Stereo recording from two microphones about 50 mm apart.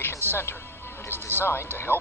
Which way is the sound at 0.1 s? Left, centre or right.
Left.